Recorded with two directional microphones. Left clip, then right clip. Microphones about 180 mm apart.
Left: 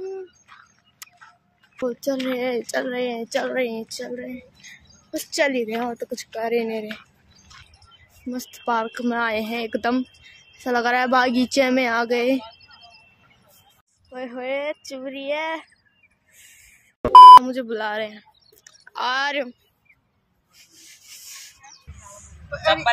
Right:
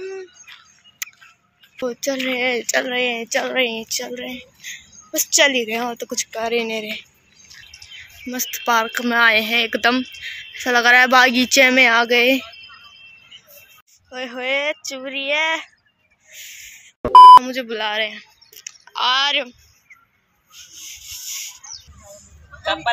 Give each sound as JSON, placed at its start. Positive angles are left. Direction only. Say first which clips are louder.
{"t": 0.5, "sound": "a sound", "louder": "right 4 dB", "side_deg": -10}
{"t": 1.0, "sound": "tick-tock", "louder": "right 12 dB", "side_deg": 15}
{"t": 1.9, "sound": "a woman's voice", "louder": "right 3 dB", "side_deg": 15}
{"t": 8.3, "sound": "a woman's voice", "louder": "right 5 dB", "side_deg": 10}
{"t": 14.1, "sound": "a woman's voice", "louder": "right 5 dB", "side_deg": 5}
{"t": 17.0, "sound": "speech", "louder": "even", "side_deg": 0}
{"t": 17.5, "sound": "speech", "louder": "right 3 dB", "side_deg": 20}
{"t": 18.9, "sound": "a woman's voice", "louder": "right 5 dB", "side_deg": 30}
{"t": 20.5, "sound": "a sound", "louder": "right 11 dB", "side_deg": 25}